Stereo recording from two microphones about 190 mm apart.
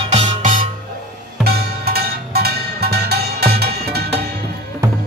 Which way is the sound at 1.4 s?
55° right (ahead or behind).